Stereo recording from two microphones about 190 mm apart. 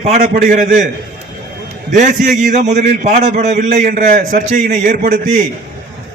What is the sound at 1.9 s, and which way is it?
A man's voice, 40° right (ahead or behind).